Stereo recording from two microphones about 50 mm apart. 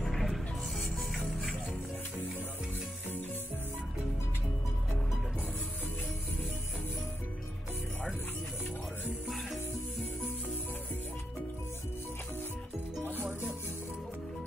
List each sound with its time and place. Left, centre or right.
0.0 s music: centre
13.0 s music: right